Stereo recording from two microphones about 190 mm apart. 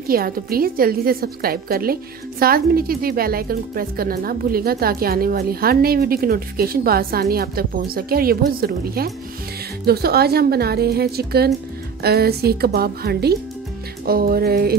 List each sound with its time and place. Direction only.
0.1 s a woman's voice: 50° right (ahead or behind)